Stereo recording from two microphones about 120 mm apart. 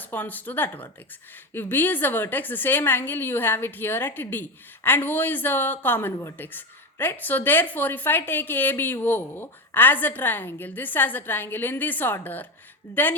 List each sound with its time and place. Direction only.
0.0 s a woman's voice: 15° left (ahead or behind)